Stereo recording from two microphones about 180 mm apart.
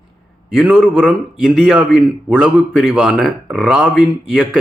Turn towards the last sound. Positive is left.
turn(degrees=-5)  # may be behind; listen again after turning